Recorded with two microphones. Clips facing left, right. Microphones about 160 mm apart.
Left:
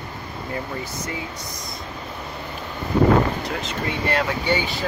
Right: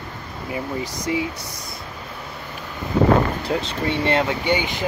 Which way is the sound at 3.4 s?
30° right (ahead or behind).